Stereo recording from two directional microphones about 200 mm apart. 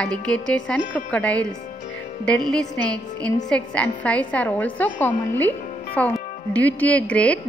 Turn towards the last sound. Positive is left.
turn(degrees=5)  # may be behind; listen again after turning